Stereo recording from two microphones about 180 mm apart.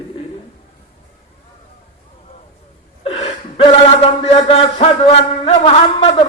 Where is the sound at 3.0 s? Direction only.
30° left (ahead or behind).